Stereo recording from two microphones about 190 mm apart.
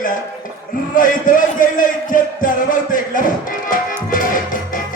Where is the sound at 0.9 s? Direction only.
45° left (ahead or behind).